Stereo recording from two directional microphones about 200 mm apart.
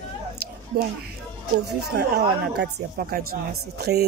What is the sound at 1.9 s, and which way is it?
Speech, 55° right (ahead or behind).